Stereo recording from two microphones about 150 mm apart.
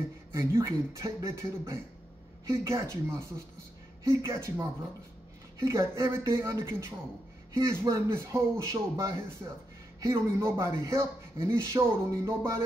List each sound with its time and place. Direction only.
0.3 s speech: 20° right (ahead or behind)